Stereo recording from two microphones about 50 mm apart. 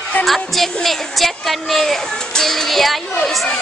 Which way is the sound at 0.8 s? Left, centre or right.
Centre.